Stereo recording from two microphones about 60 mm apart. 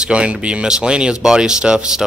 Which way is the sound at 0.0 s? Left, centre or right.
Centre.